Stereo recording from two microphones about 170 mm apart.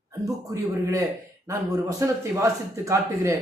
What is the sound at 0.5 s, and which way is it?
A man's voice, 20° right (ahead or behind).